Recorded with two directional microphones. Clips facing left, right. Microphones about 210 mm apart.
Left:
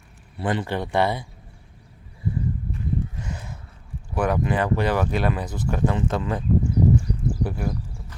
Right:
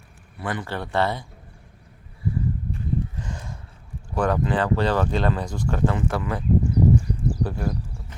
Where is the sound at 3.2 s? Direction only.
10° left (ahead or behind).